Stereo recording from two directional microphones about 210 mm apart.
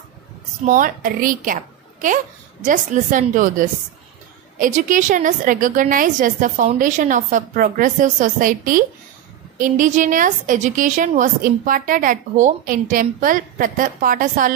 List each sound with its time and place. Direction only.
0.7 s a woman's voice: 40° right (ahead or behind)